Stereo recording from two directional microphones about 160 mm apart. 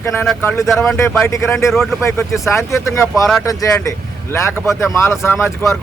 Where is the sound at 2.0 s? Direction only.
15° left (ahead or behind).